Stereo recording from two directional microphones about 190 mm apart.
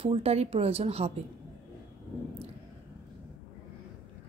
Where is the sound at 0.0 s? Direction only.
30° right (ahead or behind).